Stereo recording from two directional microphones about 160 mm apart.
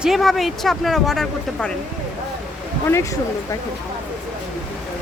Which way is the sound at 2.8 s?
20° left (ahead or behind).